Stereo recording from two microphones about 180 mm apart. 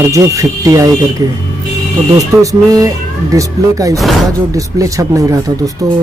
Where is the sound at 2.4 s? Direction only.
20° right (ahead or behind).